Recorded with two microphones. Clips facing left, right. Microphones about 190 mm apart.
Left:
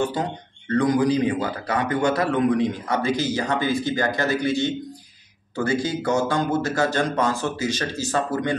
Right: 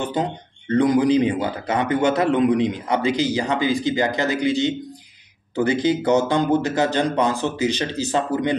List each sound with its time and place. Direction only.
0.0 s speech: 20° right (ahead or behind)